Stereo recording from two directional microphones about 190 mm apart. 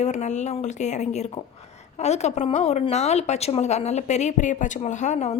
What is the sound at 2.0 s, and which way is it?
A woman's voice, 35° left (ahead or behind).